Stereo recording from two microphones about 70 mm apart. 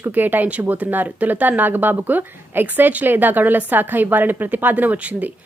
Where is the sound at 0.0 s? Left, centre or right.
Right.